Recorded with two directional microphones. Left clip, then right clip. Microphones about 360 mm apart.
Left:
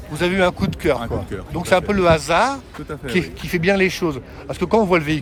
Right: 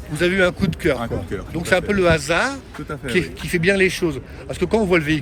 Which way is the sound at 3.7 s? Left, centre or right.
Left.